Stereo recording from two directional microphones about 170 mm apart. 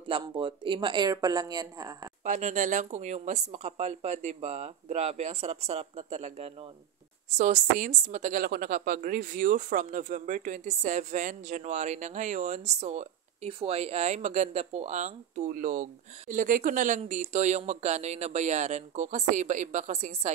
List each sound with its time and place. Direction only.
0.1 s speech: 30° right (ahead or behind)
2.2 s a woman's voice: 45° right (ahead or behind)